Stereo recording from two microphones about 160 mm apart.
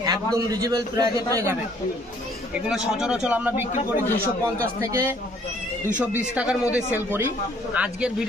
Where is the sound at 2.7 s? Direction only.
5° right (ahead or behind).